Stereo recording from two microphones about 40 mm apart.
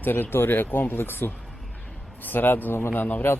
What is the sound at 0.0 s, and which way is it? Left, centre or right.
Speech, left.